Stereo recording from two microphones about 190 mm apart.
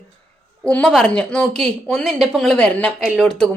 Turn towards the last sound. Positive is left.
turn(degrees=5)  # may be behind; listen again after turning